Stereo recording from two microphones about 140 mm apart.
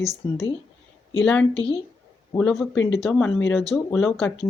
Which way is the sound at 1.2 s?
10° left (ahead or behind).